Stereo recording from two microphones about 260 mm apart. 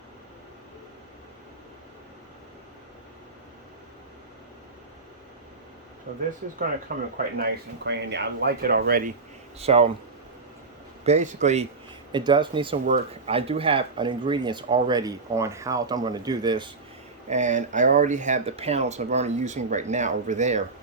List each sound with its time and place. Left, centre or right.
6.9 s speech: right
9.6 s speech: right
11.0 s speech: right
17.2 s speech: right